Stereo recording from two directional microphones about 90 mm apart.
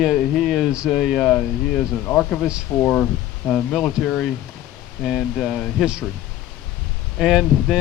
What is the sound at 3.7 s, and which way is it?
Speech, centre (ahead or behind).